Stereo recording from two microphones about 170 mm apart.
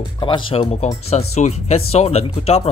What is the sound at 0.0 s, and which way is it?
Speech, 30° left (ahead or behind).